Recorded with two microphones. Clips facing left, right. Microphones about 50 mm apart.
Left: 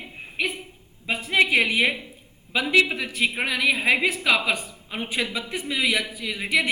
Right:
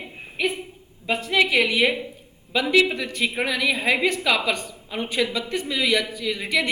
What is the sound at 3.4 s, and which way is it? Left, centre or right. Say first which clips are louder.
A woman's voice: right 1 dB; centre.